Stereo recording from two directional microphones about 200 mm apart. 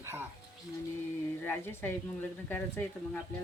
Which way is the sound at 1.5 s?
10° left (ahead or behind).